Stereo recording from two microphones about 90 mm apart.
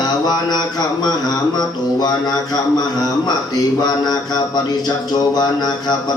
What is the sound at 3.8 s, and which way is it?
A man's voice, 50° left (ahead or behind).